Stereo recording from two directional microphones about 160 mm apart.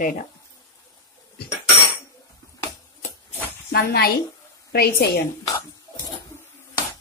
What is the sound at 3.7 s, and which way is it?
A woman's voice, 70° left (ahead or behind).